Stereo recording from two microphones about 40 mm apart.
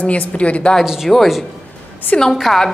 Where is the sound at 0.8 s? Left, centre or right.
Centre.